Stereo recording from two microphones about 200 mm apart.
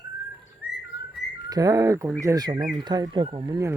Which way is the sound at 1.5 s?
15° right (ahead or behind).